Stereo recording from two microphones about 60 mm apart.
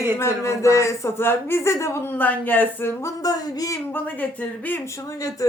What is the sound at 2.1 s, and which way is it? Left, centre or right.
Speech, left.